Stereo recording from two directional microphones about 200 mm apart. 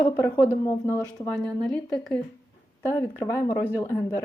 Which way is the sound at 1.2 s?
5° left (ahead or behind).